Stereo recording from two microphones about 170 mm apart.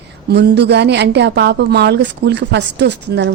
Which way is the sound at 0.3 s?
75° right (ahead or behind).